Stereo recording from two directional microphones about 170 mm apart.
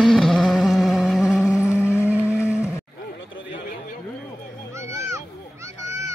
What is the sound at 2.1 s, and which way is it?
Vehicle, 5° right (ahead or behind).